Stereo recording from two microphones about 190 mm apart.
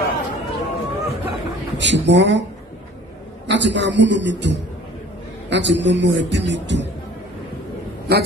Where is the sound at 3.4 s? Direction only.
65° right (ahead or behind).